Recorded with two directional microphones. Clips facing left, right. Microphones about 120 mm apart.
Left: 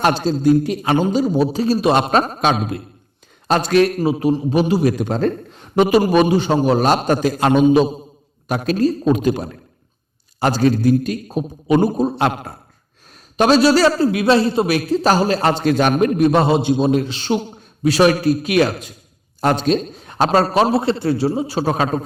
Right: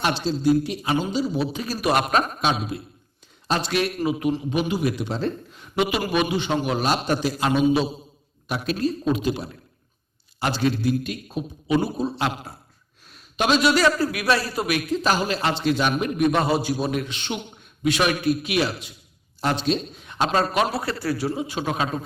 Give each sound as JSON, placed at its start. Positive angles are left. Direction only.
{"t": 0.0, "sound": "a man's voice", "side_deg": 45}
{"t": 1.6, "sound": "a man's voice", "side_deg": 30}
{"t": 2.4, "sound": "a man's voice", "side_deg": 50}
{"t": 5.5, "sound": "a man's voice", "side_deg": 40}
{"t": 13.3, "sound": "a man's voice", "side_deg": 40}